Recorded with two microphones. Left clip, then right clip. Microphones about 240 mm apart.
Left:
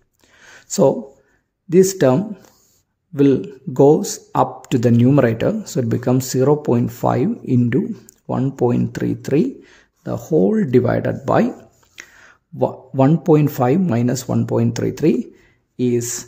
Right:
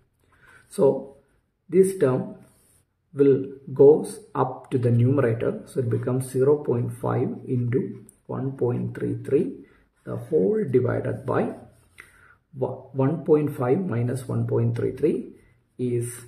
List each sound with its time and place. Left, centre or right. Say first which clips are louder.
0.4 s a sound: left 6 dB; left
1.7 s speech: left 6 dB; left
3.2 s speech: left 3 dB; left